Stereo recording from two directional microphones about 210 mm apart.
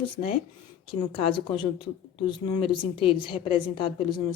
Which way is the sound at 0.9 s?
25° left (ahead or behind).